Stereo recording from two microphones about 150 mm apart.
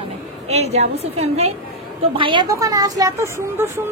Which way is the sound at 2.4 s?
20° right (ahead or behind).